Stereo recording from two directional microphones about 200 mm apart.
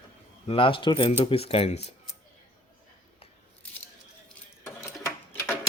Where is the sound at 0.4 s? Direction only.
25° left (ahead or behind).